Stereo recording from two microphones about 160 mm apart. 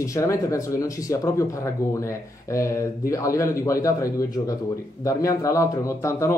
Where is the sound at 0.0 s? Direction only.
20° left (ahead or behind).